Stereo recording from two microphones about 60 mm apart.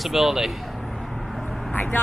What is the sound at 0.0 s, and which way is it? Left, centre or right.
Speech, centre.